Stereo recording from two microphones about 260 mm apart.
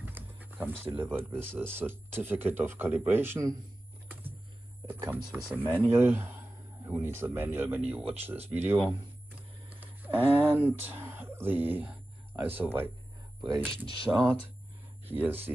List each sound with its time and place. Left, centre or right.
0.0 s a sound: centre
1.1 s speech: centre
5.0 s speech: centre
9.8 s livestock: centre
10.6 s speech: centre